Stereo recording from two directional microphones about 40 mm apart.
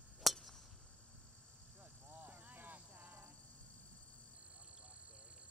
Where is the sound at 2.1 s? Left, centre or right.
Right.